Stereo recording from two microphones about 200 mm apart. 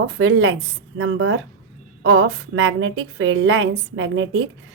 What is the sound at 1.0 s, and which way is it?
A woman's voice, 80° right.